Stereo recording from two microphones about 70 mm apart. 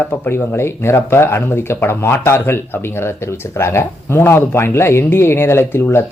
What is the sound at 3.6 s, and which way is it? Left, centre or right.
Speech, left.